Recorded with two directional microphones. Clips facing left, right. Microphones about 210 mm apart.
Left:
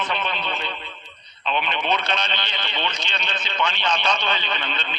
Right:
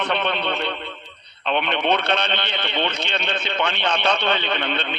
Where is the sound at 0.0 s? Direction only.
65° right (ahead or behind).